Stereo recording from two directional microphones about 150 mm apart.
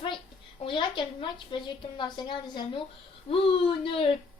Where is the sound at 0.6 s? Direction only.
35° left (ahead or behind).